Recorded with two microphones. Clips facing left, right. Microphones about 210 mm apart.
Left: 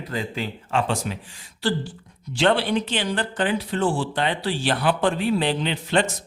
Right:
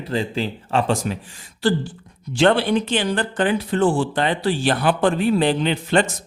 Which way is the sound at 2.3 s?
50° right (ahead or behind).